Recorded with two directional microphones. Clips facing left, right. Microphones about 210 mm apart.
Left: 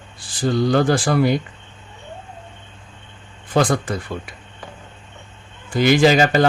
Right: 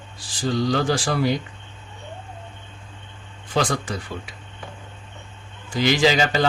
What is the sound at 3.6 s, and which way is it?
Speech, 50° left (ahead or behind).